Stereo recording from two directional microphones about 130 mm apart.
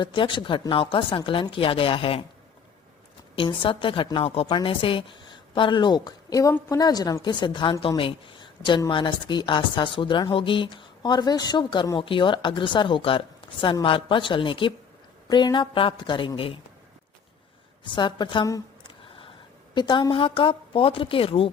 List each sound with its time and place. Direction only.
0.0 s a woman's voice: 40° left (ahead or behind)
3.3 s a woman's voice: 40° left (ahead or behind)
17.8 s a woman's voice: 35° left (ahead or behind)
18.8 s a sound: 40° left (ahead or behind)
19.7 s a woman's voice: 35° left (ahead or behind)